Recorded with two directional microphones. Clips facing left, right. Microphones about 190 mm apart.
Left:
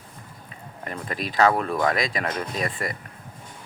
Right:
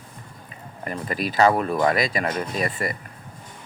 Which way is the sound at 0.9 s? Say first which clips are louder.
Right 4 dB; 5° right (ahead or behind).